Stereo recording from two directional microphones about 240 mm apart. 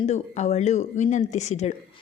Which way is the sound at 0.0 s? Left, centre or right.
Left.